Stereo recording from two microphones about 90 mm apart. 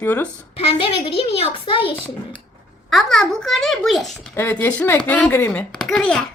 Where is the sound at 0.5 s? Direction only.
90° left.